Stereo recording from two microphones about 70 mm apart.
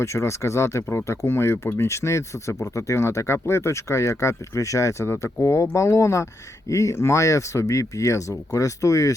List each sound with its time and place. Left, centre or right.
0.0 s speech: left